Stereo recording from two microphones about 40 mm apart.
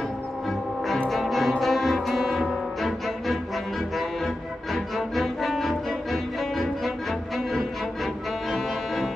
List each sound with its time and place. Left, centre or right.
0.5 s music: centre
4.7 s music: centre